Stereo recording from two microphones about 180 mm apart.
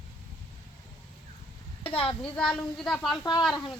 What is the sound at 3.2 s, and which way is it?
Speech, 25° left (ahead or behind).